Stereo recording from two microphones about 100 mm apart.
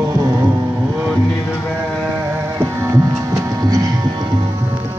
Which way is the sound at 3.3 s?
40° right (ahead or behind).